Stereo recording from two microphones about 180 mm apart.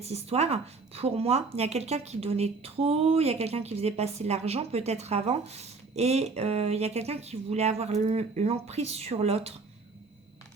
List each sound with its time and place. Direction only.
0.0 s speech: 35° right (ahead or behind)